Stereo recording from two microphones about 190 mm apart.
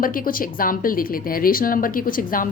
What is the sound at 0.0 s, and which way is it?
A woman's voice, 50° left (ahead or behind).